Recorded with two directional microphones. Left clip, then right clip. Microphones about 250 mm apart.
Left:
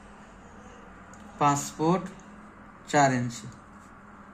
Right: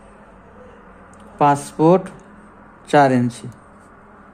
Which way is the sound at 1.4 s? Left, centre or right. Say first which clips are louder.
Right 9 dB; right.